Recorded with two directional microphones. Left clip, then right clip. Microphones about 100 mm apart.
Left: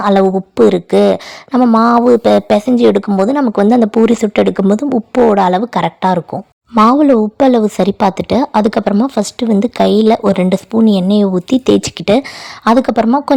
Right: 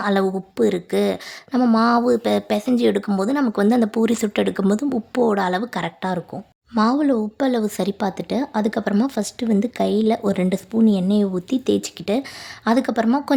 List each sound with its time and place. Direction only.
0.0 s a woman's voice: 55° left (ahead or behind)
8.9 s a woman's voice: 40° left (ahead or behind); by 12.2 s 70° left (ahead or behind)
12.6 s speech: 50° left (ahead or behind)